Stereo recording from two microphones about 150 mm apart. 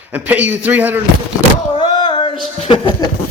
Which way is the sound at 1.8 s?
30° left (ahead or behind).